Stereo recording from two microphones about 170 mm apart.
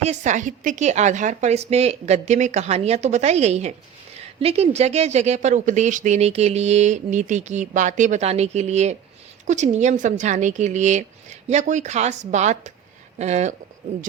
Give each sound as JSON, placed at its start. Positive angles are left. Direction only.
{"t": 0.0, "sound": "speech", "side_deg": -45}